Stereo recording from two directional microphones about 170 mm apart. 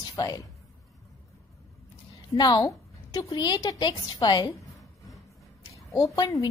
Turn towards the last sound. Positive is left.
turn(degrees=20)  # may be behind; listen again after turning